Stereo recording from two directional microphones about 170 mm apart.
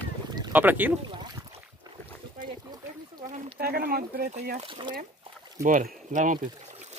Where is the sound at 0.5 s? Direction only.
10° right (ahead or behind).